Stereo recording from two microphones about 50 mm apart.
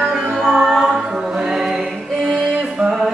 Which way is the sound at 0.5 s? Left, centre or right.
Centre.